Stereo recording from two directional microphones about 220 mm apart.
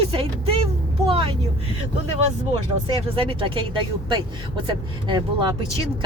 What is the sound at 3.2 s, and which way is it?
Speech, 25° right (ahead or behind).